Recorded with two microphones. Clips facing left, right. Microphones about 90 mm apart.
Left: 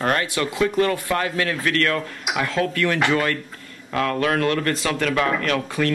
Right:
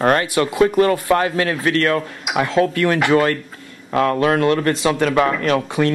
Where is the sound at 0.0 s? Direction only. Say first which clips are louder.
Right 6 dB; 30° right (ahead or behind).